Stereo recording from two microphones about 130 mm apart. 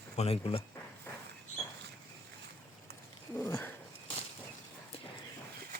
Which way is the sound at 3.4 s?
20° left (ahead or behind).